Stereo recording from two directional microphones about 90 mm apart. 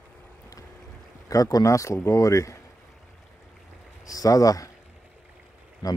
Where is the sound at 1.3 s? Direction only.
40° left (ahead or behind).